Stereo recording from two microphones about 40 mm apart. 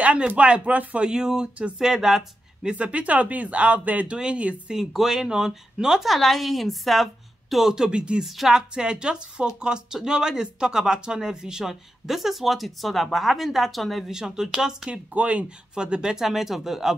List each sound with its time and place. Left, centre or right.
0.4 s speech: right
1.0 s speech: centre
2.7 s speech: right
4.1 s speech: right
4.9 s a woman's voice: centre
6.0 s speech: centre
7.7 s speech: centre
14.1 s speech: centre
14.9 s speech: right
15.7 s speech: centre
16.2 s speech: centre